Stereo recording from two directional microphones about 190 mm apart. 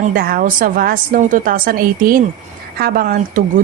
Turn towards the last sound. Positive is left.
turn(degrees=-45)  # may be behind; listen again after turning